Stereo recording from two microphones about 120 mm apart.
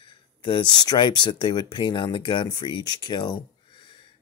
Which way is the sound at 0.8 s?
40° left (ahead or behind).